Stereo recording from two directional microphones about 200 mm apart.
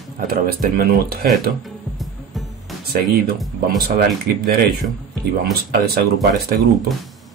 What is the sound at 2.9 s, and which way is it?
Speech, 50° right (ahead or behind).